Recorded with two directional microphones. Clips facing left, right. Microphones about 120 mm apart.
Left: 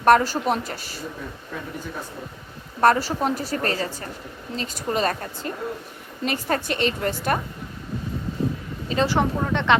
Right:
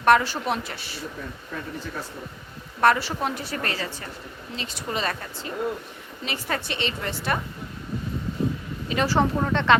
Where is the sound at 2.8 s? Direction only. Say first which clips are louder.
Left 2 dB; 40° left (ahead or behind).